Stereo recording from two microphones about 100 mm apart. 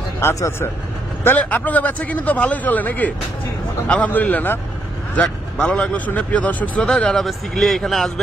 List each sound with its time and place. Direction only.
0.2 s a man's voice: 25° left (ahead or behind); by 8.1 s centre (ahead or behind)